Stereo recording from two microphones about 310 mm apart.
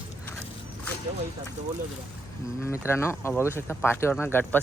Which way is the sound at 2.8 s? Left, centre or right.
Centre.